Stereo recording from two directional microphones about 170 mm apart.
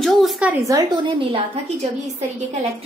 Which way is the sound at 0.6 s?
20° right (ahead or behind).